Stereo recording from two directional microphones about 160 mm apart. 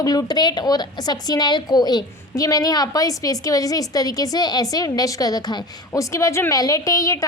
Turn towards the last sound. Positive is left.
turn(degrees=20)  # may be behind; listen again after turning